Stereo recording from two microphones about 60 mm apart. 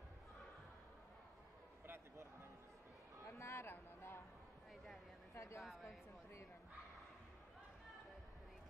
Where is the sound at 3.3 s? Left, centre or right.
Left.